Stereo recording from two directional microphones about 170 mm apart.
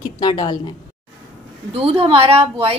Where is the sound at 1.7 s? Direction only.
35° right (ahead or behind).